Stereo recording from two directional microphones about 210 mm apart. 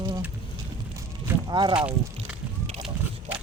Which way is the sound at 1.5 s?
20° right (ahead or behind).